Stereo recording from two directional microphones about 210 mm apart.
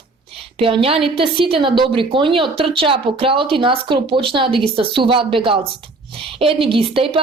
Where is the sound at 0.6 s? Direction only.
25° right (ahead or behind).